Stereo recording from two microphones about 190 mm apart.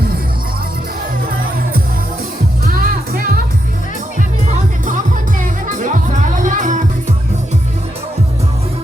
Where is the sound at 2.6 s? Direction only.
50° right (ahead or behind).